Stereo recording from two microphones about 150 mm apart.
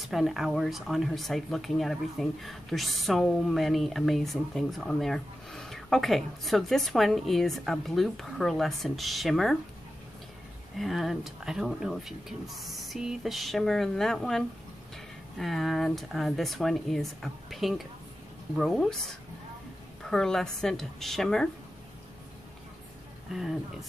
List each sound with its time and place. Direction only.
0.0 s speech: centre (ahead or behind)
10.8 s speech: centre (ahead or behind)
20.1 s speech: 5° left (ahead or behind)
23.3 s speech: centre (ahead or behind)